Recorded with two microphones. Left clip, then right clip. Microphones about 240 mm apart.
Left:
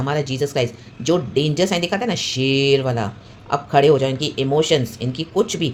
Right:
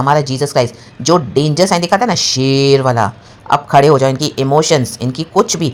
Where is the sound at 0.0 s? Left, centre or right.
Right.